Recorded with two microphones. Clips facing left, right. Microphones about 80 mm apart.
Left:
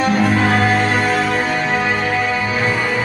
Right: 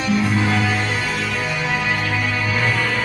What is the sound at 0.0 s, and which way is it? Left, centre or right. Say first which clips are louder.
Music: left 4 dB; left.